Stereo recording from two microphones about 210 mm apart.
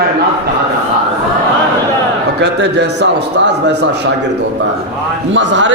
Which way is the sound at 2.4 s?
55° right (ahead or behind).